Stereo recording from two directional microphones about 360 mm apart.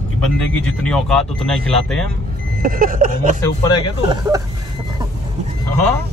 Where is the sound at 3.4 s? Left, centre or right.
Centre.